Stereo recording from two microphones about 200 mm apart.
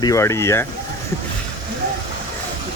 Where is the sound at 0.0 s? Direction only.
15° left (ahead or behind).